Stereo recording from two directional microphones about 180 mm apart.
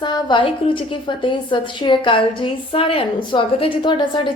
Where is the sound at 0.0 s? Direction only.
25° left (ahead or behind).